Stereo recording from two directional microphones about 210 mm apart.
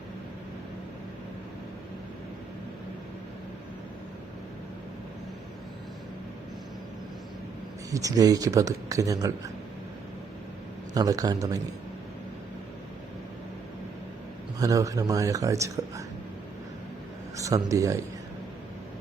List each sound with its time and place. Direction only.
7.9 s speech: 15° right (ahead or behind)
10.9 s speech: 15° right (ahead or behind)
14.6 s speech: 15° right (ahead or behind)
17.3 s speech: 15° right (ahead or behind)